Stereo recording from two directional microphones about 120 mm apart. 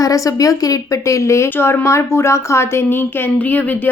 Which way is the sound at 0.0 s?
30° left (ahead or behind).